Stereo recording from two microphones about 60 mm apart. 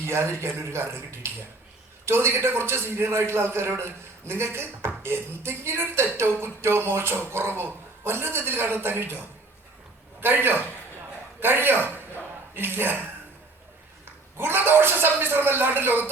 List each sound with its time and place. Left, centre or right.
0.0 s a man's voice: right
14.3 s speech: right